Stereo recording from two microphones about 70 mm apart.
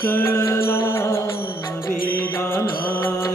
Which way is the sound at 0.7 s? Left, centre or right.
Left.